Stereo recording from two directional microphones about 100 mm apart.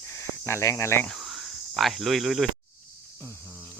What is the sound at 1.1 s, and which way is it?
Cricket, centre (ahead or behind).